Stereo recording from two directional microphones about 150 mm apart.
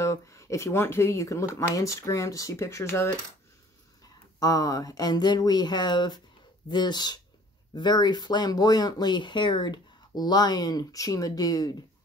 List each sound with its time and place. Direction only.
0.0 s speech: 20° left (ahead or behind)
4.4 s speech: 25° left (ahead or behind)